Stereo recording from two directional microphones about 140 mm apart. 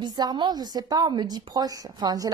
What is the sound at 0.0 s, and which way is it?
A woman's voice, 30° right (ahead or behind).